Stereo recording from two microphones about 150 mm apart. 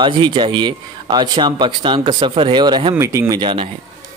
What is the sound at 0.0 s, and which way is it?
Speech, 30° right (ahead or behind).